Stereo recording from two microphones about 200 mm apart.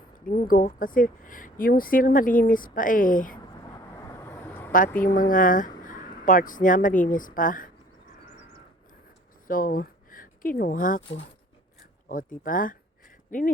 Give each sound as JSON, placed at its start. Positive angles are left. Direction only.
{"t": 0.3, "sound": "speech", "side_deg": 45}
{"t": 3.6, "sound": "vehicle", "side_deg": 15}
{"t": 4.7, "sound": "a woman's voice", "side_deg": 45}
{"t": 9.5, "sound": "speech", "side_deg": 45}
{"t": 12.4, "sound": "speech", "side_deg": 45}